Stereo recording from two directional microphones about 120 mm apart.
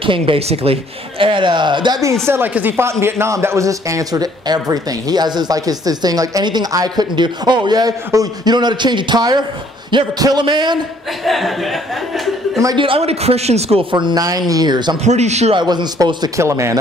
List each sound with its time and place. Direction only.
0.0 s speech: 50° right (ahead or behind)
2.2 s a woman's voice: 20° right (ahead or behind); by 10.8 s 40° right (ahead or behind)
11.2 s speech: centre (ahead or behind)
12.7 s speech: 50° right (ahead or behind)
13.9 s a man's voice: 35° right (ahead or behind)
15.0 s a man's voice: 70° right (ahead or behind)
15.5 s a man's voice: 35° right (ahead or behind)